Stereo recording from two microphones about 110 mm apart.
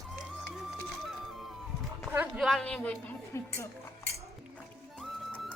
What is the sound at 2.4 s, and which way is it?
Speech, centre (ahead or behind).